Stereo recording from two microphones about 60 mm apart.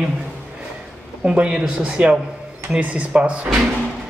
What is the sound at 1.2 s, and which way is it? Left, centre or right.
Speech, centre.